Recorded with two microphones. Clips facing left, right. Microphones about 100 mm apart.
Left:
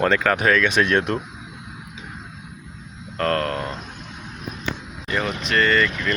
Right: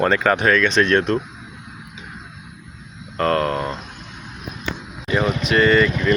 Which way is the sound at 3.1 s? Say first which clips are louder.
Right 3 dB; 5° right (ahead or behind).